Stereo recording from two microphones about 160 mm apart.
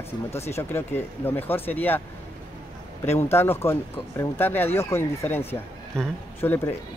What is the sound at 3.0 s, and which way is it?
Speech, 15° left (ahead or behind).